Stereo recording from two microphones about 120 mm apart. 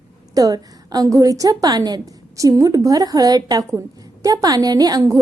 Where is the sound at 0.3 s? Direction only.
30° right (ahead or behind).